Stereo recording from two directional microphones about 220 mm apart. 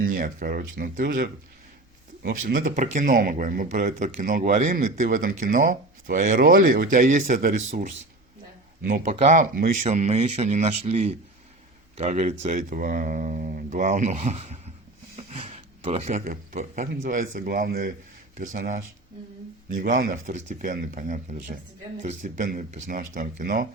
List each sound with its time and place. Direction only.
0.0 s speech: 40° right (ahead or behind)
8.9 s speech: 35° right (ahead or behind)
15.1 s a sound: 30° right (ahead or behind)
16.9 s speech: 35° right (ahead or behind)